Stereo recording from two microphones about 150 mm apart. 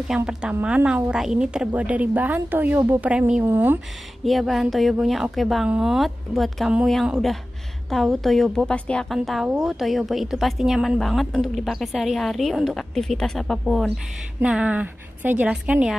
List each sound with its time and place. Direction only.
0.1 s a woman's voice: 5° right (ahead or behind)
4.2 s a woman's voice: centre (ahead or behind)